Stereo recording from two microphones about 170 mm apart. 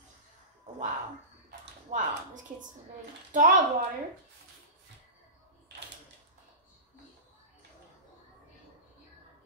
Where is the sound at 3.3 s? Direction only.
50° right (ahead or behind).